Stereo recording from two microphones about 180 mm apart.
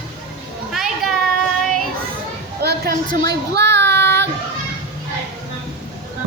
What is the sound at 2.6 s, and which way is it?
Speech, 60° right (ahead or behind).